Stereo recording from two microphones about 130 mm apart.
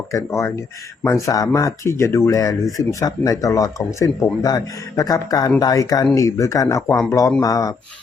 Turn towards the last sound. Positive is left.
turn(degrees=30)  # may be behind; listen again after turning